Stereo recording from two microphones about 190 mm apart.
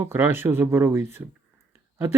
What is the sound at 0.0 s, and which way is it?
Speech, 10° right (ahead or behind).